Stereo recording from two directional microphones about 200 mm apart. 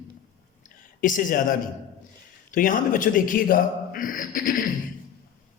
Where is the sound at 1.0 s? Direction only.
40° left (ahead or behind).